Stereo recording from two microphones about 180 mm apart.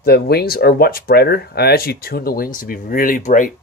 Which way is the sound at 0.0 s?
60° left (ahead or behind).